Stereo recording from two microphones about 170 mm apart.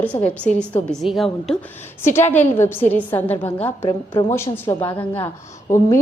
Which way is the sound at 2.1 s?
15° left (ahead or behind).